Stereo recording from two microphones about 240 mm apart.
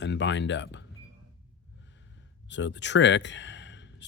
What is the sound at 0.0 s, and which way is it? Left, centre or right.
Speech, left.